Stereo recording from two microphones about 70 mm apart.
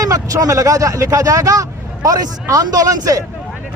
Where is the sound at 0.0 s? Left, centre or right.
Right.